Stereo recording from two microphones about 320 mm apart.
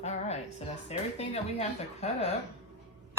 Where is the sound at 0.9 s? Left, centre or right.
Centre.